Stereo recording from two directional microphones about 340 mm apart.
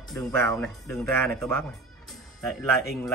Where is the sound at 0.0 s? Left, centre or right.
Centre.